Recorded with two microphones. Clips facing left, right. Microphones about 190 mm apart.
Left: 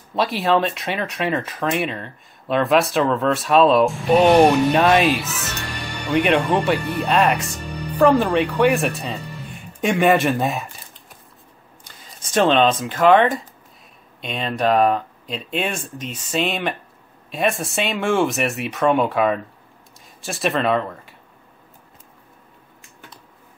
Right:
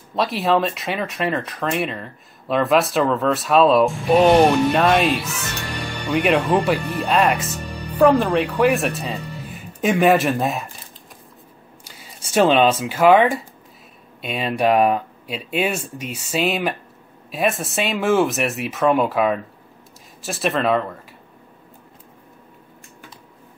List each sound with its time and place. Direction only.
0.1 s speech: centre (ahead or behind)
11.8 s speech: 10° right (ahead or behind)